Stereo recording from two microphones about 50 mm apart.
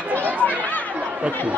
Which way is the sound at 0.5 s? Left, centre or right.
Left.